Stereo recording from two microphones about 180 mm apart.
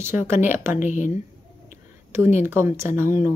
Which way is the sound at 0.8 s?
45° left (ahead or behind).